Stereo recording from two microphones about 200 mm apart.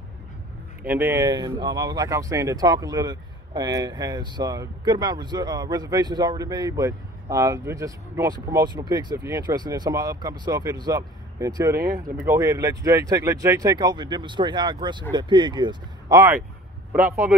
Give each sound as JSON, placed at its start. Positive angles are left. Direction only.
{"t": 0.8, "sound": "speech", "side_deg": -10}